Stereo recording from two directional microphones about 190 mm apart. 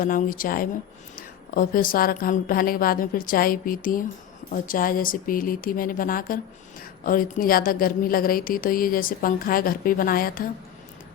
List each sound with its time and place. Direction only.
0.0 s a woman's voice: 45° left (ahead or behind)